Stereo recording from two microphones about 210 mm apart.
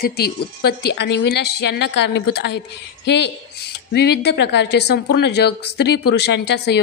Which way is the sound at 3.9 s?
50° left (ahead or behind).